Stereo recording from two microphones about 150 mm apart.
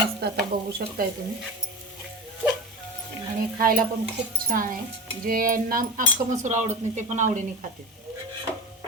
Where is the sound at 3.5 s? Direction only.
75° right (ahead or behind); by 7.4 s 55° right (ahead or behind).